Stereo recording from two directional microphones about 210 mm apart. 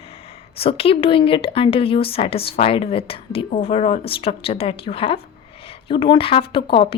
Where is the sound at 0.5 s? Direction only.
25° left (ahead or behind).